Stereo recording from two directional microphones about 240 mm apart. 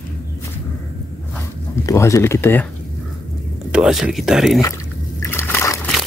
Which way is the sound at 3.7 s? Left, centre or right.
Centre.